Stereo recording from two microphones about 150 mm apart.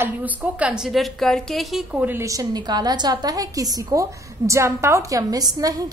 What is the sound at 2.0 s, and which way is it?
A woman's voice, 20° right (ahead or behind).